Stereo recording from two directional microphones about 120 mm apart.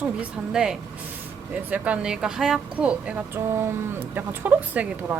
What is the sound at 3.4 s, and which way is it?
Speech, 20° right (ahead or behind).